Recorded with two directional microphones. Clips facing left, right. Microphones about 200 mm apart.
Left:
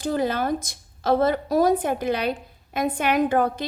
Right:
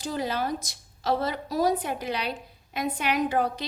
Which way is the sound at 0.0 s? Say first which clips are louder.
Left 5 dB; 55° left (ahead or behind).